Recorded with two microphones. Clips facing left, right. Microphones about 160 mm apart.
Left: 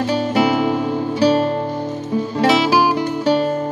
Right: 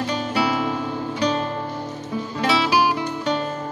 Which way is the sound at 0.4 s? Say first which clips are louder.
Left 6 dB; 20° left (ahead or behind).